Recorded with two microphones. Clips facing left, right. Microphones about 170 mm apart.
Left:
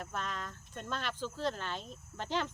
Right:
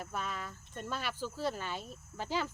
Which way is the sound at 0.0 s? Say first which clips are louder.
Even; 10° right (ahead or behind).